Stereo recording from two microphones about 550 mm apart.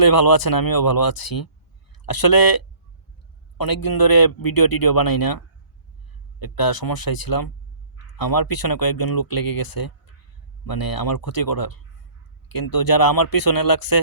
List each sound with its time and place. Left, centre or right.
0.0 s speech: left
6.4 s speech: left